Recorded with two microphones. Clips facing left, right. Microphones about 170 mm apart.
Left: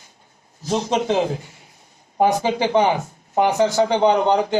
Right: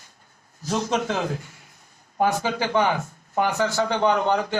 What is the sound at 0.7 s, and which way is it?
A man's voice, 25° left (ahead or behind).